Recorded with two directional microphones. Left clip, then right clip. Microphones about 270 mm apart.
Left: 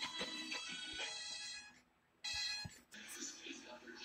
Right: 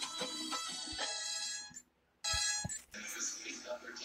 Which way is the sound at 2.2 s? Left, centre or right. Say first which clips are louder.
Right 6 dB; right.